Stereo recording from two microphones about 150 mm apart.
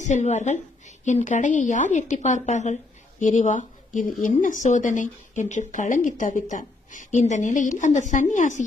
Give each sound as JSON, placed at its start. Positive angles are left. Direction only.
{"t": 0.0, "sound": "a woman's voice", "side_deg": 50}